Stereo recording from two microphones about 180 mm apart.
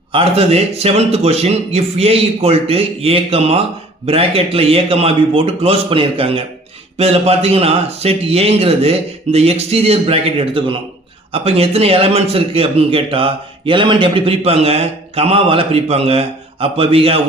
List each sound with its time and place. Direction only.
0.1 s a man's voice: 30° right (ahead or behind)